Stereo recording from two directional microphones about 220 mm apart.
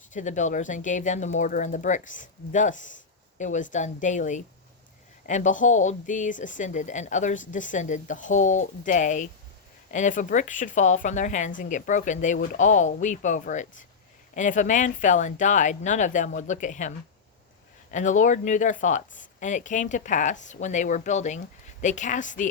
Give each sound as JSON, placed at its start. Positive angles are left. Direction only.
{"t": 0.1, "sound": "speech", "side_deg": 35}
{"t": 17.9, "sound": "speech", "side_deg": 35}